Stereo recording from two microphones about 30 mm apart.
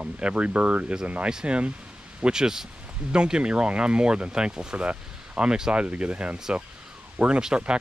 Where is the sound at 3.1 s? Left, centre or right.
Right.